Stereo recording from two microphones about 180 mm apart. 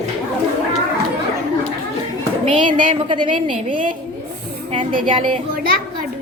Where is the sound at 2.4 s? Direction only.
30° right (ahead or behind).